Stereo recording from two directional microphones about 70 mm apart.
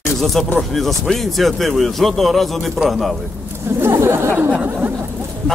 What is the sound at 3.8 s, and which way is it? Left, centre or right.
Speech, right.